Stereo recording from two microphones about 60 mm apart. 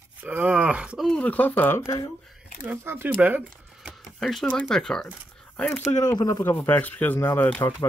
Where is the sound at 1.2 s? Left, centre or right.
Left.